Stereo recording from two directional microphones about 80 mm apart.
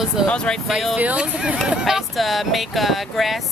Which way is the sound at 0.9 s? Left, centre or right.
Centre.